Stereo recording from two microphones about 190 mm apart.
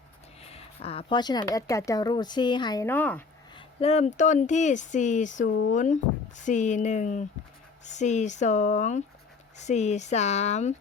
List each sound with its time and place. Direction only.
0.4 s speech: 30° left (ahead or behind); by 3.2 s 10° left (ahead or behind)
3.5 s speech: 30° left (ahead or behind)